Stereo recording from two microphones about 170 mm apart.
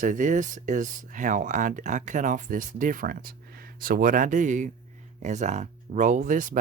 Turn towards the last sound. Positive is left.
turn(degrees=-50)  # may be behind; listen again after turning